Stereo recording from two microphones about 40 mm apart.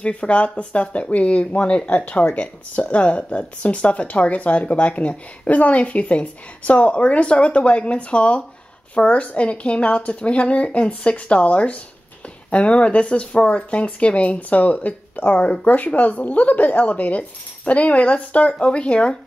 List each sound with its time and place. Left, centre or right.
0.0 s speech: left
15.3 s speech: left
15.6 s speech: left